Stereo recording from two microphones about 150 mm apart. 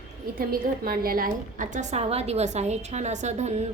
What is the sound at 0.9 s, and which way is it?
A woman's voice, 75° right (ahead or behind).